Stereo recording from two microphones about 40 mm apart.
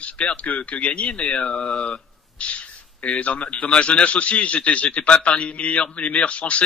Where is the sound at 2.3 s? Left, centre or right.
Left.